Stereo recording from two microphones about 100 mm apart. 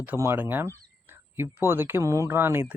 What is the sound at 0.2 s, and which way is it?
Speech, 20° right (ahead or behind).